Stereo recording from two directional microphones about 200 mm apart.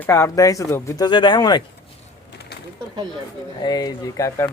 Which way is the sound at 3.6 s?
20° left (ahead or behind).